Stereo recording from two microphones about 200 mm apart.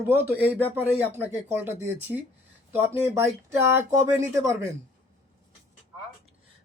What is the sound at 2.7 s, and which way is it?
Speech, 10° right (ahead or behind).